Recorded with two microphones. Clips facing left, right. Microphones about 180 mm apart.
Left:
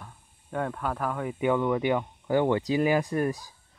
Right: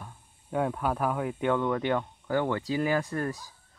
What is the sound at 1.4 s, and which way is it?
Speech, 10° left (ahead or behind).